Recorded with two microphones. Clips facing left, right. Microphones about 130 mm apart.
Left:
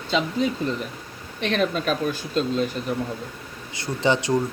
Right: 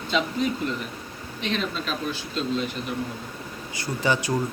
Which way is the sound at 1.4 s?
55° left (ahead or behind).